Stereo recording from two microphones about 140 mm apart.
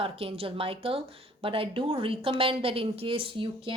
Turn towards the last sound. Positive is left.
turn(degrees=-40)  # may be behind; listen again after turning